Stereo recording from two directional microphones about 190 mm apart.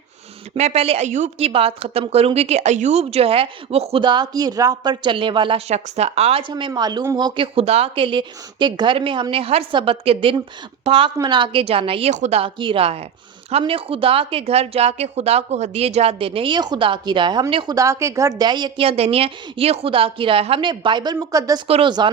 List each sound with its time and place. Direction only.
0.5 s a woman's voice: 35° right (ahead or behind)